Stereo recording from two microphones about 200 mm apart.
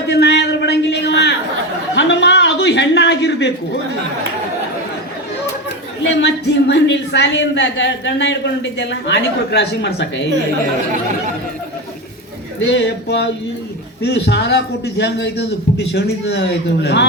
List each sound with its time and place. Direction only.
0.1 s a sound: 55° left (ahead or behind)
2.0 s chuckle: 60° left (ahead or behind)
6.0 s speech: 60° left (ahead or behind)
12.5 s speech: 60° left (ahead or behind)